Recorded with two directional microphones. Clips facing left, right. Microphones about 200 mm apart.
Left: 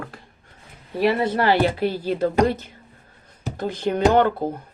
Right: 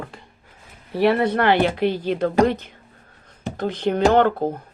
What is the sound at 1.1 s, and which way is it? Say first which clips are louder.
Speech: right 1 dB; 60° right (ahead or behind).